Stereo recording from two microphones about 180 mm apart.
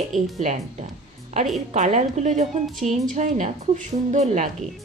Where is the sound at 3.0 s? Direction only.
45° right (ahead or behind).